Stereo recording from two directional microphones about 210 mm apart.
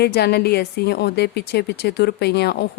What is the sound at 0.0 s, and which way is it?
Speech, 50° left (ahead or behind).